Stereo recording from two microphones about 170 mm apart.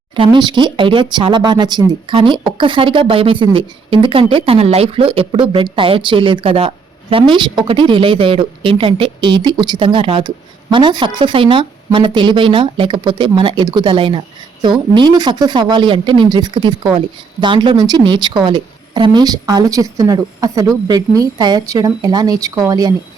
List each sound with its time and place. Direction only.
0.2 s speech: 25° right (ahead or behind)